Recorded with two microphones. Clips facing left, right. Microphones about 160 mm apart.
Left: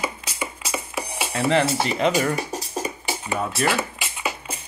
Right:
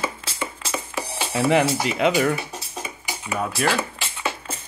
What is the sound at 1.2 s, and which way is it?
Music, 5° right (ahead or behind).